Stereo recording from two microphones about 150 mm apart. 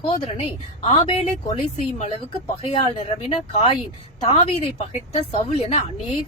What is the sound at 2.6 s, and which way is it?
A woman's voice, 40° left (ahead or behind).